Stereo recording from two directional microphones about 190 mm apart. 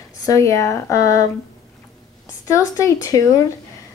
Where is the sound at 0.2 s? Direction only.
15° left (ahead or behind).